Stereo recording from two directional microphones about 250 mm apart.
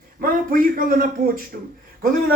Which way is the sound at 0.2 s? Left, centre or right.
Right.